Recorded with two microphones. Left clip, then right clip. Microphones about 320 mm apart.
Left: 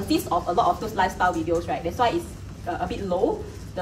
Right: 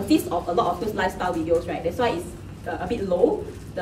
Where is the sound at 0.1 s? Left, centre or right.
Centre.